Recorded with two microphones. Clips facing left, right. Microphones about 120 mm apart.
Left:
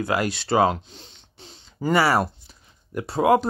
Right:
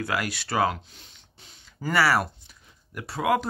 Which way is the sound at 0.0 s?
25° left (ahead or behind).